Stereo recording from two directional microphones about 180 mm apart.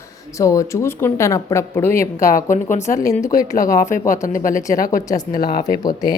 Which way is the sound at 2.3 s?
50° left (ahead or behind).